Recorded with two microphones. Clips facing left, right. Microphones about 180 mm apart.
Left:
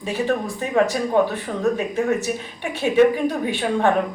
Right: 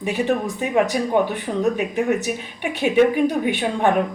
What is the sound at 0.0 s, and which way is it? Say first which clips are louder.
Speech: right 1 dB; 20° right (ahead or behind).